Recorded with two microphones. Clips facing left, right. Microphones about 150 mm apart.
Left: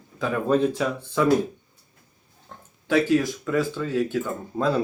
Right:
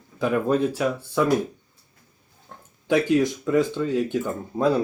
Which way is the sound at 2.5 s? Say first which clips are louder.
Even; 10° right (ahead or behind).